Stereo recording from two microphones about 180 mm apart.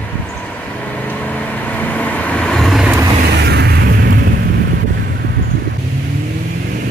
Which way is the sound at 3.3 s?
65° right (ahead or behind).